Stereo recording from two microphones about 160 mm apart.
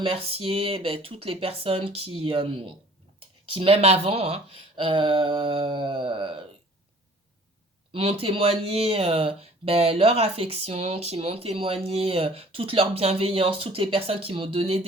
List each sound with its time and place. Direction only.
0.0 s speech: 35° right (ahead or behind)
7.9 s speech: 35° right (ahead or behind)